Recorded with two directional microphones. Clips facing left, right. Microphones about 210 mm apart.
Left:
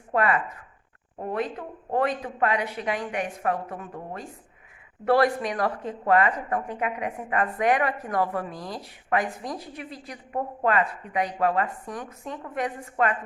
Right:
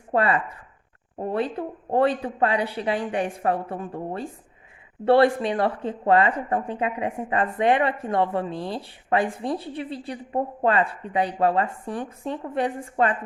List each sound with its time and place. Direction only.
0.1 s a woman's voice: 30° right (ahead or behind)